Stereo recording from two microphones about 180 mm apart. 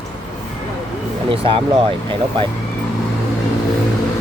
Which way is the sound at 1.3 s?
30° right (ahead or behind).